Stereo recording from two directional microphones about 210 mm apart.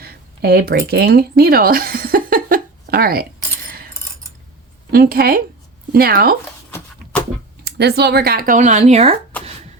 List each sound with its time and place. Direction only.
0.0 s speech: 45° right (ahead or behind)
4.9 s speech: 45° right (ahead or behind)
6.7 s a sound: 10° left (ahead or behind)
7.6 s speech: 50° right (ahead or behind); by 9.1 s 30° right (ahead or behind)